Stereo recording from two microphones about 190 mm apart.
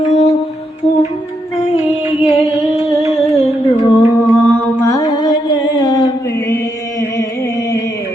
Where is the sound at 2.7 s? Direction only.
Centre (ahead or behind).